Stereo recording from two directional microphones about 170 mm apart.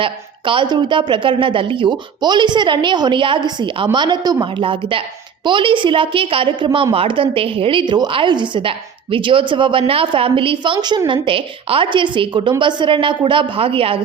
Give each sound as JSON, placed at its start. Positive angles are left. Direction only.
{"t": 0.0, "sound": "a woman's voice", "side_deg": -30}